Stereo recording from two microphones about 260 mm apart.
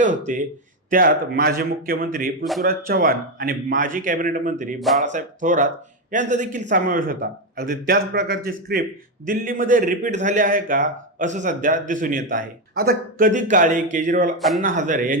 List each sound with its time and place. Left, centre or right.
0.3 s a man's voice: right
4.8 s speech: centre
5.0 s a man's voice: right